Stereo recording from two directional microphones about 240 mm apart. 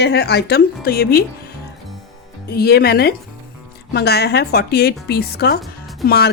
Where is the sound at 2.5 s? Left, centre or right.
Left.